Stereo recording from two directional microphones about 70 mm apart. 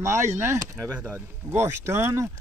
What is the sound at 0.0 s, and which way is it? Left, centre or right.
Speech, right.